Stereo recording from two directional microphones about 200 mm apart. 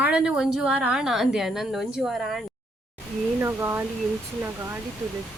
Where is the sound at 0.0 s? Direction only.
5° right (ahead or behind).